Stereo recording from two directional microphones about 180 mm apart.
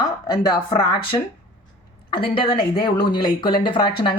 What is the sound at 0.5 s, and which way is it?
A woman's voice, 30° left (ahead or behind).